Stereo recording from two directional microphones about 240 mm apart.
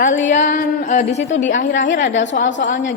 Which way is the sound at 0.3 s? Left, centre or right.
Left.